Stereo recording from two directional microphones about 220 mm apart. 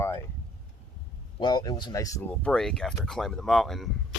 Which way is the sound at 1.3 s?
20° left (ahead or behind).